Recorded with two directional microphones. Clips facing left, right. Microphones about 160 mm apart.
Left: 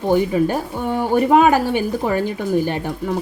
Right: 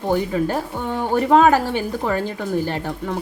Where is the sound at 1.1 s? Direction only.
15° left (ahead or behind).